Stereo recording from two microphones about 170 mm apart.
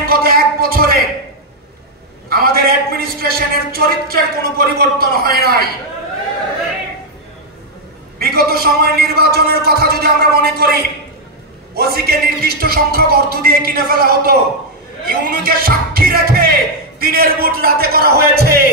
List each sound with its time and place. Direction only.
0.0 s a sound: 60° right (ahead or behind)
2.2 s a man's voice: 65° right (ahead or behind)
8.2 s a man's voice: 65° right (ahead or behind)